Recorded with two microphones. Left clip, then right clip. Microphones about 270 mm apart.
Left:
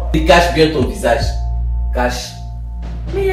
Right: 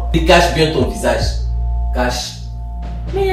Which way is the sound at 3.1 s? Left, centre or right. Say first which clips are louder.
Even; centre.